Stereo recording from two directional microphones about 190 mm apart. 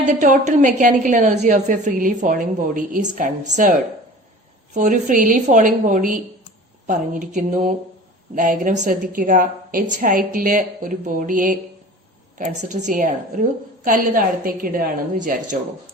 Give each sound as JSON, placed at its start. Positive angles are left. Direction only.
{"t": 0.2, "sound": "a woman's voice", "side_deg": -40}